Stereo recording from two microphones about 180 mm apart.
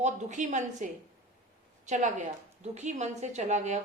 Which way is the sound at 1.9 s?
45° right (ahead or behind).